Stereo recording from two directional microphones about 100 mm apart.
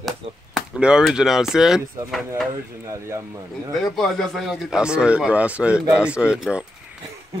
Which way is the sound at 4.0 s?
5° left (ahead or behind).